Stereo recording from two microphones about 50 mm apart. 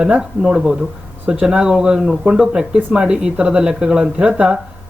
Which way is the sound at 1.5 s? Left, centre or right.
Centre.